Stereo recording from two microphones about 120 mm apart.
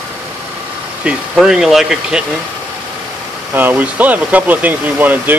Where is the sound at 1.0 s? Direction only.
5° right (ahead or behind).